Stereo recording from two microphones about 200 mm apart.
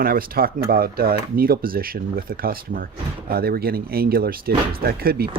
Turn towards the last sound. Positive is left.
turn(degrees=-50)  # may be behind; listen again after turning